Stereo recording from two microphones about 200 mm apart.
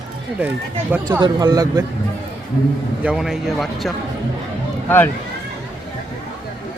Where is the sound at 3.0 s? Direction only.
5° right (ahead or behind).